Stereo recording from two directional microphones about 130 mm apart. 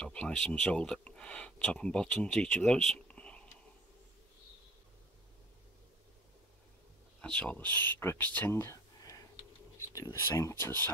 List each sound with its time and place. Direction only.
0.0 s speech: 5° left (ahead or behind)
7.2 s speech: 10° left (ahead or behind)